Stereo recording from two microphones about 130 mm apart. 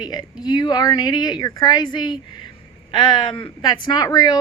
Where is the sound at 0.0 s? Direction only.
35° left (ahead or behind).